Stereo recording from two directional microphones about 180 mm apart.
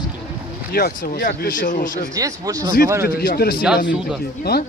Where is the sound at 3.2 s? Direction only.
55° left (ahead or behind).